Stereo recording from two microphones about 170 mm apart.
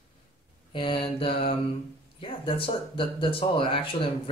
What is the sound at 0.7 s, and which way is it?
Speech, 30° left (ahead or behind).